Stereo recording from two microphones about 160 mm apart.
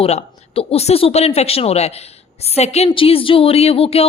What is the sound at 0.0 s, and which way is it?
Speech, 40° left (ahead or behind).